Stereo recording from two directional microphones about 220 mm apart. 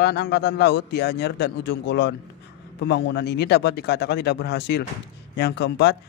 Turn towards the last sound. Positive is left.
turn(degrees=50)  # may be behind; listen again after turning